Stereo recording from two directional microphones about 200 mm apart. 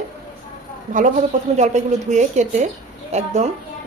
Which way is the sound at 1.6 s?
35° right (ahead or behind).